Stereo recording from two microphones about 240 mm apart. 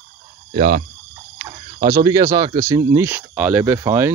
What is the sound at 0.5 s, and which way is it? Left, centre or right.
Speech, right.